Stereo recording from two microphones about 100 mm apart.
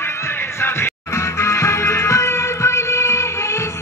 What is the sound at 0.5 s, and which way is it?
Music, 25° left (ahead or behind).